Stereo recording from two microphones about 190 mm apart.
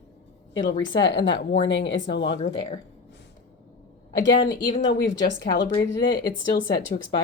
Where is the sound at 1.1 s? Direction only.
70° left (ahead or behind).